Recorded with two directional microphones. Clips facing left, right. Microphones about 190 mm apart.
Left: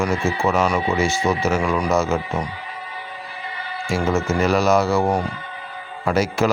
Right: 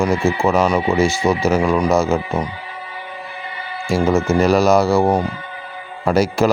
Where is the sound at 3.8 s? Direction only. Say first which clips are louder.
Right 5 dB; 35° right (ahead or behind).